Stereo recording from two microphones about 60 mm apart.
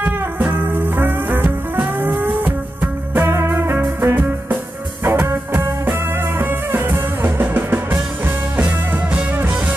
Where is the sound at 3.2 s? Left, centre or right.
Right.